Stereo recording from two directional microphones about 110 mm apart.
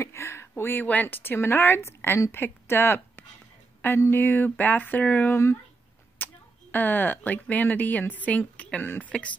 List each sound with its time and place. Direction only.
0.0 s a woman's voice: 25° left (ahead or behind)